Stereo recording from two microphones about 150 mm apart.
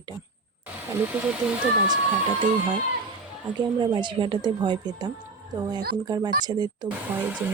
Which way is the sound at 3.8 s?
30° right (ahead or behind).